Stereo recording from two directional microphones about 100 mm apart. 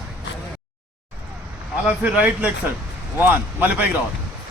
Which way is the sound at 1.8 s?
15° right (ahead or behind).